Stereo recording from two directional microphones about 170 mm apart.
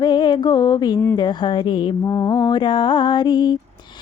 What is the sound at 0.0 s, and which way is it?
Mantra, 25° left (ahead or behind).